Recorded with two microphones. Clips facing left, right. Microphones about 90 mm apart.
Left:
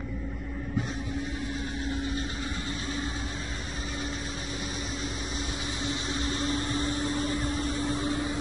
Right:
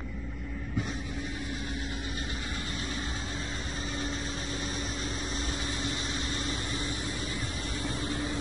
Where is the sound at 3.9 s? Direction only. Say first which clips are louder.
Even; 5° left (ahead or behind).